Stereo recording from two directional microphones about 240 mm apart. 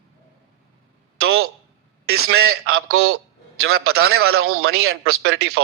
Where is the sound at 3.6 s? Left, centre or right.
Right.